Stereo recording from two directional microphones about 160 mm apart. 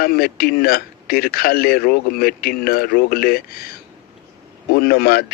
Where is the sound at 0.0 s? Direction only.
70° left (ahead or behind).